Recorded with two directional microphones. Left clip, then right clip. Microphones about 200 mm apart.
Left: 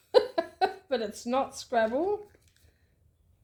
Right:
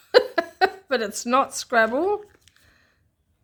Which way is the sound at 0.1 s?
30° right (ahead or behind).